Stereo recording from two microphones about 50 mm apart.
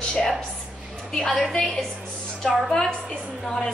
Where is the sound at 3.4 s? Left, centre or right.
Centre.